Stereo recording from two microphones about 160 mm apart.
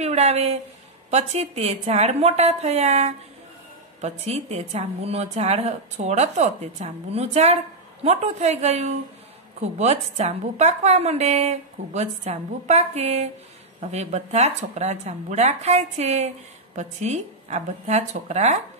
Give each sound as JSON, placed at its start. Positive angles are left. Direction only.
{"t": 0.0, "sound": "a woman's voice", "side_deg": -45}